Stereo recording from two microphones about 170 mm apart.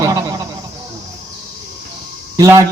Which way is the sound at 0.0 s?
20° right (ahead or behind).